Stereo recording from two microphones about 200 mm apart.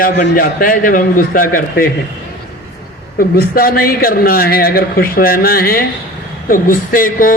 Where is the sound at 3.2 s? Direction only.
50° left (ahead or behind).